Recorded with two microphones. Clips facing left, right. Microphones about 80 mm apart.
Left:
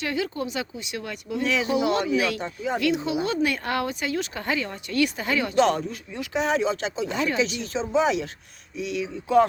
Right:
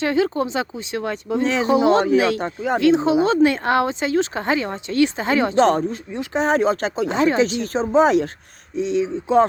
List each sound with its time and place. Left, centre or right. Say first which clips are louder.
0.0 s speech: right 8 dB; right
2.4 s speech: right 6 dB; right
2.8 s speech: right 10 dB; right
7.1 s speech: right 8 dB; right
7.6 s speech: right 7 dB; right
8.7 s speech: right 8 dB; right